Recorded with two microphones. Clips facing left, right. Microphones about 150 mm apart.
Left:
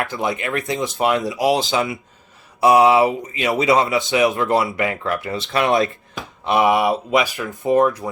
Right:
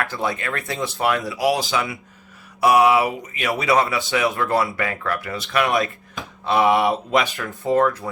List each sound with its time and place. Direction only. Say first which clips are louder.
0.0 s speech: left 2 dB; 20° left (ahead or behind)
6.4 s a sound: left 1 dB; 15° left (ahead or behind)
6.7 s speech: left 1 dB; 5° left (ahead or behind)